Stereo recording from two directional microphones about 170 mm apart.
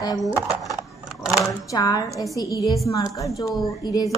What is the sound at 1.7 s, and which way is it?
A woman's voice, 20° left (ahead or behind).